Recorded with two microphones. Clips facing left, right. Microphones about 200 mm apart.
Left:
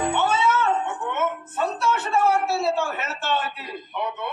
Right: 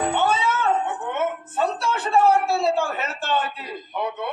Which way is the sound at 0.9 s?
35° right (ahead or behind).